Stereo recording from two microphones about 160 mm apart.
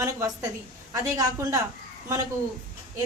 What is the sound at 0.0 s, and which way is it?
A woman's voice, 20° right (ahead or behind).